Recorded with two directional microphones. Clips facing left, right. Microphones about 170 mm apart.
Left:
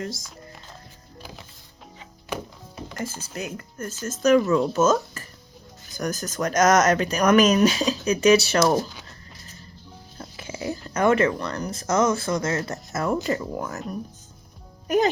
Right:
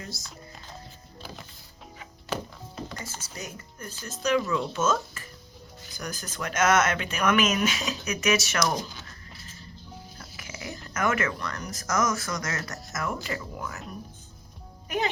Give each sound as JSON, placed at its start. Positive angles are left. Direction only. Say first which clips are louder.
{"t": 1.2, "sound": "music", "louder": "even", "side_deg": 10}
{"t": 3.0, "sound": "speech", "louder": "left 8 dB", "side_deg": 55}
{"t": 10.2, "sound": "speech", "louder": "left 12 dB", "side_deg": 30}
{"t": 14.8, "sound": "a child's voice", "louder": "left 8 dB", "side_deg": 40}